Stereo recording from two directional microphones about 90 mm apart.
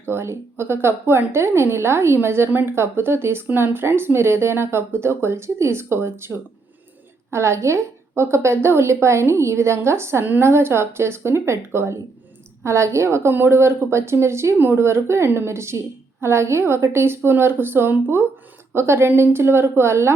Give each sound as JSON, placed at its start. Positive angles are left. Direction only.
{"t": 0.0, "sound": "a woman's voice", "side_deg": -25}